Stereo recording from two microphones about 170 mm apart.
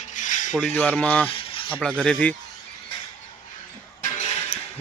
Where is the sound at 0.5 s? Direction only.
5° left (ahead or behind).